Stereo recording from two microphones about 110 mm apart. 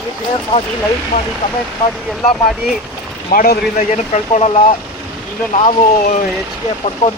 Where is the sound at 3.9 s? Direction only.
90° left.